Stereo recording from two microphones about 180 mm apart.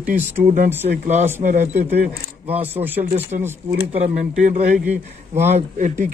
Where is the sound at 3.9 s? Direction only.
40° right (ahead or behind).